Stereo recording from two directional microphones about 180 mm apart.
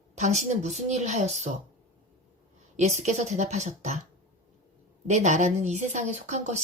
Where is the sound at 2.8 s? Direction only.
40° right (ahead or behind).